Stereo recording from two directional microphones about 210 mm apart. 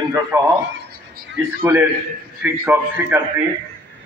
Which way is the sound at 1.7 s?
10° right (ahead or behind).